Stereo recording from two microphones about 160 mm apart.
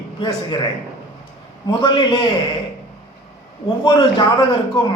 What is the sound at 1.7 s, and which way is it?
Speech, 30° left (ahead or behind).